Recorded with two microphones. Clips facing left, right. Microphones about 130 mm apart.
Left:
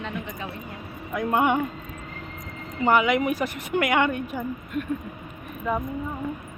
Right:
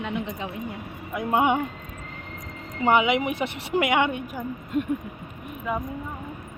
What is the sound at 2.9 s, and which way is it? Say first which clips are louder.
A woman's voice: even; 20° right (ahead or behind).